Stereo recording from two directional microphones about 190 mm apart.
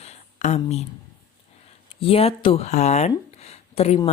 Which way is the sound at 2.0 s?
30° left (ahead or behind).